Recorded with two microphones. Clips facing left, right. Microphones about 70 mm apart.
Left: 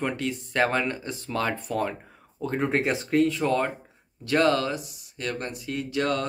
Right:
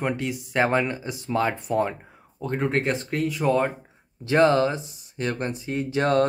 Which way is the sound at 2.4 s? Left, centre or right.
Centre.